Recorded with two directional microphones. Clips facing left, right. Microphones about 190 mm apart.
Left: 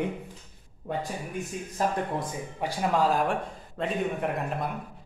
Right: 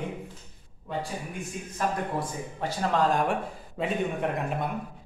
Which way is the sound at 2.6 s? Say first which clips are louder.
Even; 10° left (ahead or behind).